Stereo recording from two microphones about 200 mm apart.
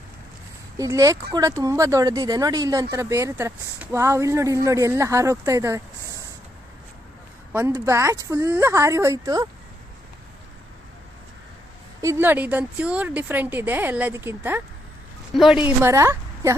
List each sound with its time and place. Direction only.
0.8 s speech: 15° right (ahead or behind)
7.5 s speech: 15° right (ahead or behind)
12.0 s speech: 10° right (ahead or behind)